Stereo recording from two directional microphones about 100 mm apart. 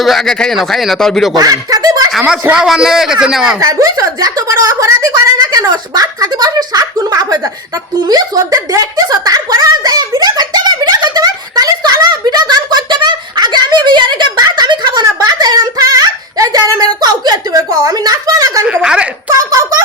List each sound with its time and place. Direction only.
0.0 s speech: centre (ahead or behind)
1.4 s snicker: 40° right (ahead or behind)
2.1 s speech: 5° right (ahead or behind)
3.6 s speech: 35° right (ahead or behind)
8.0 s a sound: 35° right (ahead or behind)
17.0 s speech: 45° right (ahead or behind)
18.7 s speech: 10° right (ahead or behind)
19.3 s speech: 35° right (ahead or behind)